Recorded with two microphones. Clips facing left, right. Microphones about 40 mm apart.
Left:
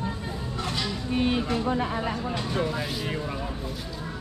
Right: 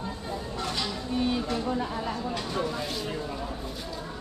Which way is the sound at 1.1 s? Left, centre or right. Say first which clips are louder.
Left 3 dB; left.